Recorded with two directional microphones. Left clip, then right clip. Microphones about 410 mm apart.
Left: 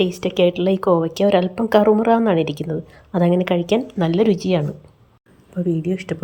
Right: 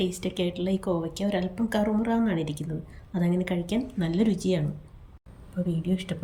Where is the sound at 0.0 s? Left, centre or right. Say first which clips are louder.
Left 12 dB; centre.